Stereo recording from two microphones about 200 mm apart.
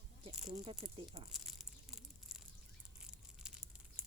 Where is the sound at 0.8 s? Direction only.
30° right (ahead or behind).